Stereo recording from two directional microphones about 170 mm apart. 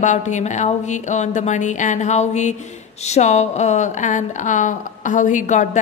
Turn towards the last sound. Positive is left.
turn(degrees=45)  # may be behind; listen again after turning